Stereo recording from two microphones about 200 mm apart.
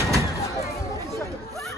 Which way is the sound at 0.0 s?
15° right (ahead or behind).